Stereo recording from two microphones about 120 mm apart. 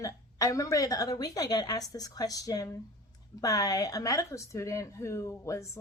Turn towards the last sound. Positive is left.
turn(degrees=25)  # may be behind; listen again after turning